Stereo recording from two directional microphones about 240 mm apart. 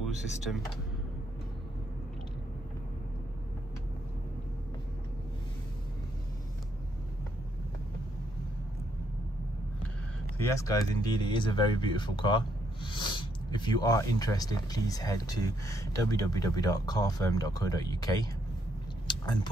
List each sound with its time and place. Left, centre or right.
0.0 s speech: centre
10.3 s speech: centre
19.0 s a sound: centre